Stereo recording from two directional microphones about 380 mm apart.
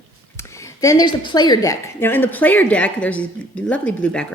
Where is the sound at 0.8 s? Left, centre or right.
Centre.